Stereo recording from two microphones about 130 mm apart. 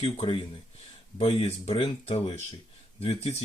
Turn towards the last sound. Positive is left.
turn(degrees=50)  # may be behind; listen again after turning